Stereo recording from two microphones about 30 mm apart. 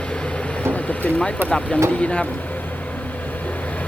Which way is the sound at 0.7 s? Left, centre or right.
Left.